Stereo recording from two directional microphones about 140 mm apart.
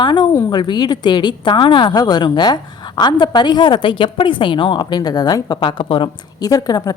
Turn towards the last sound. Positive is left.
turn(degrees=25)  # may be behind; listen again after turning